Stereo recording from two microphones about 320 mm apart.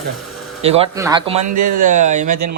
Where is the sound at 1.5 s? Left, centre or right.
Right.